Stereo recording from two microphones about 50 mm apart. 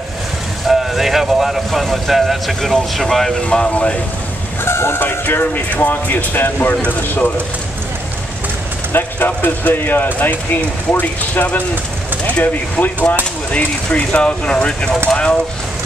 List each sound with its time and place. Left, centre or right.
0.7 s speech: centre
3.4 s speech: centre
4.6 s speech: left
5.1 s speech: left
8.9 s speech: left